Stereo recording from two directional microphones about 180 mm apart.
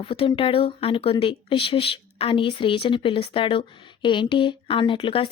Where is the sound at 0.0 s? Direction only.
30° left (ahead or behind).